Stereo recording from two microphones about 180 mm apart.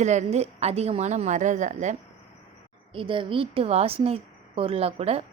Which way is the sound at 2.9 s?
30° right (ahead or behind).